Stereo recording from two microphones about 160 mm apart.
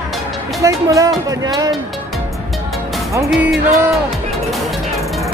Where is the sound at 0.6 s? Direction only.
20° right (ahead or behind).